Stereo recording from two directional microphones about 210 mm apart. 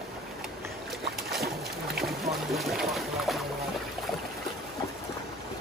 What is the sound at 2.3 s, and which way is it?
Boat, centre (ahead or behind).